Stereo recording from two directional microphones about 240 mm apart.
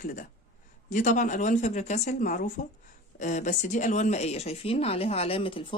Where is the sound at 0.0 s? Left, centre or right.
Left.